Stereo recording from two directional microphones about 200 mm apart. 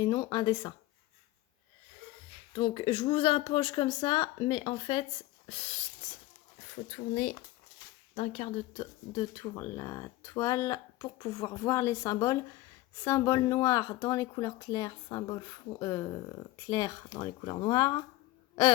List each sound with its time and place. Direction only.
0.0 s a woman's voice: 20° left (ahead or behind)
2.6 s a woman's voice: 25° left (ahead or behind)
8.1 s a woman's voice: 35° left (ahead or behind)